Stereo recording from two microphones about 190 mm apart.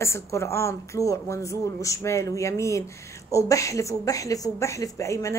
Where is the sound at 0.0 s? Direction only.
15° left (ahead or behind).